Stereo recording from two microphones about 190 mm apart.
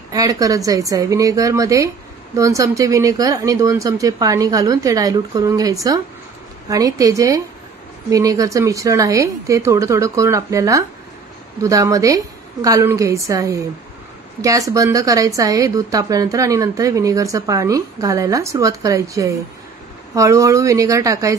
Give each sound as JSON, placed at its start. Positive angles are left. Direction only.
{"t": 0.1, "sound": "a woman's voice", "side_deg": -20}